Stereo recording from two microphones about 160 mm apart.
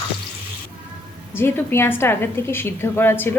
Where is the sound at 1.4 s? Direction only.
15° left (ahead or behind).